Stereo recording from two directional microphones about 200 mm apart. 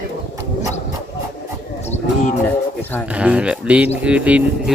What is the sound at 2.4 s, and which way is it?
Speech, 10° left (ahead or behind).